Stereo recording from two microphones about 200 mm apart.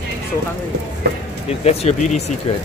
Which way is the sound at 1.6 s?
30° left (ahead or behind).